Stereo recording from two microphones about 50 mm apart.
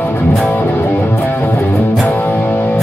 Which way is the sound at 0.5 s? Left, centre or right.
Left.